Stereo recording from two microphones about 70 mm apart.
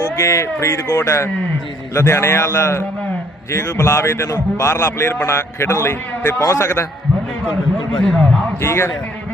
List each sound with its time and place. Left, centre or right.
0.0 s a man's voice: left
7.9 s a man's voice: centre
8.6 s a man's voice: left